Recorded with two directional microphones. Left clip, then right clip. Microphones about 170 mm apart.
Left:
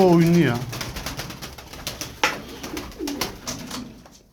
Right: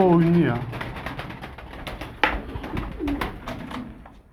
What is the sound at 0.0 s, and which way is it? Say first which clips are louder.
Speech: left 2 dB; 35° left (ahead or behind).